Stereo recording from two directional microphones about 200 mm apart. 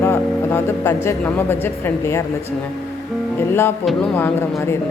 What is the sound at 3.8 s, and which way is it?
Speech, 5° left (ahead or behind).